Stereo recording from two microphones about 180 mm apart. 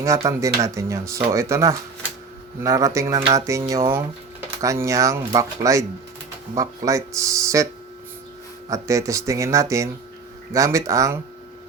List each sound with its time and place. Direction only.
0.3 s speech: 15° right (ahead or behind)
8.7 s speech: 15° right (ahead or behind)